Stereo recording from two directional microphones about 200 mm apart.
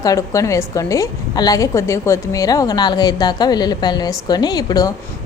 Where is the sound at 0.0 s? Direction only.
15° left (ahead or behind).